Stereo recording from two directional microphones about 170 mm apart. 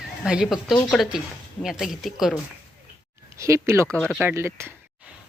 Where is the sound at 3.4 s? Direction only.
15° right (ahead or behind).